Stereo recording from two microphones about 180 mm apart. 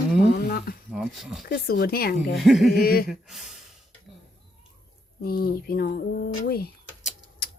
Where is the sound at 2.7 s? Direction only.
55° left (ahead or behind).